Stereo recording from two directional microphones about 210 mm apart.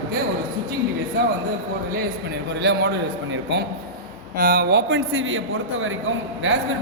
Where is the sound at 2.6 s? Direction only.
55° right (ahead or behind).